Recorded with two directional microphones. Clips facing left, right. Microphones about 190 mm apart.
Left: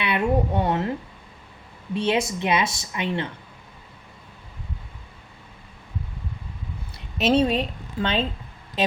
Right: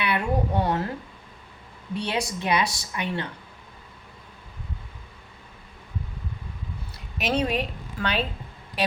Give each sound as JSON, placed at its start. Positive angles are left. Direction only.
{"t": 0.0, "sound": "a woman's voice", "side_deg": 20}
{"t": 7.2, "sound": "a woman's voice", "side_deg": 25}